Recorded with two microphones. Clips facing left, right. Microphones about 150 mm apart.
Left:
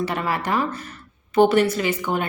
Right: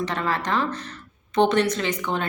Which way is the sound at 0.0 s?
10° left (ahead or behind).